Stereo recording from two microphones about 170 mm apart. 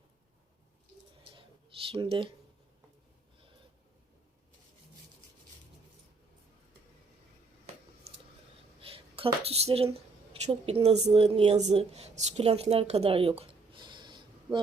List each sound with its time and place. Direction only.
1.9 s speech: 30° right (ahead or behind)
8.8 s a sound: 35° right (ahead or behind)
10.4 s a woman's voice: 40° right (ahead or behind)